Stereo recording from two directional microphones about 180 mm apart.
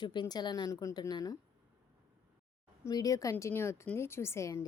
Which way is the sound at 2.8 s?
20° left (ahead or behind).